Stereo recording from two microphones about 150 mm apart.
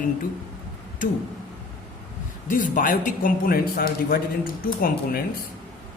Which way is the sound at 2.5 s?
60° left (ahead or behind).